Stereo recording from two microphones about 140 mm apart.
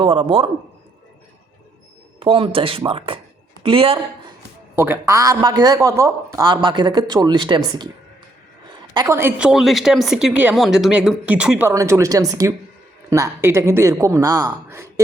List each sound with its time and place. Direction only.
0.0 s speech: 40° right (ahead or behind)
2.1 s speech: 40° right (ahead or behind)
4.7 s speech: 15° right (ahead or behind); by 7.6 s 35° right (ahead or behind)
8.9 s speech: 25° right (ahead or behind)
9.5 s speech: centre (ahead or behind)
11.7 s speech: 20° right (ahead or behind)